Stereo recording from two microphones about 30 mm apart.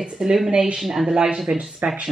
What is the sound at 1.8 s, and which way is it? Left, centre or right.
Speech, right.